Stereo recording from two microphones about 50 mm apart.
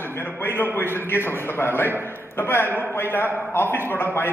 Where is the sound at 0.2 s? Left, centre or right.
Left.